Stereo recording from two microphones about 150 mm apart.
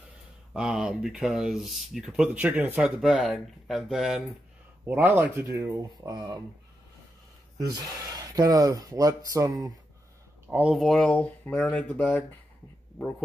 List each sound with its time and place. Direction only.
0.5 s speech: 5° right (ahead or behind)
4.8 s speech: 15° right (ahead or behind)
7.7 s speech: 25° right (ahead or behind)
10.5 s speech: 5° right (ahead or behind); by 12.0 s 10° left (ahead or behind)